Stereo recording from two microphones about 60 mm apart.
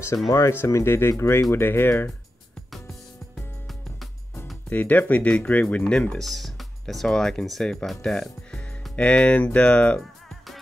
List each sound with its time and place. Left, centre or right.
0.3 s speech: left
4.6 s speech: left
5.9 s speech: centre